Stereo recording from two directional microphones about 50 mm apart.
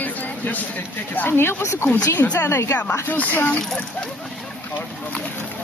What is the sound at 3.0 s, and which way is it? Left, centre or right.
Speech, left.